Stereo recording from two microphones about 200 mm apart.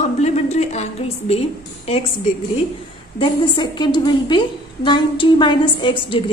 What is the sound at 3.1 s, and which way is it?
A woman's voice, 20° left (ahead or behind).